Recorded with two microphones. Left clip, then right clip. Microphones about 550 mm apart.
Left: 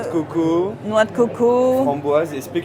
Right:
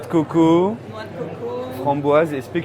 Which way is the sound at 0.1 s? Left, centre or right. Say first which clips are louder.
Right 5 dB; right.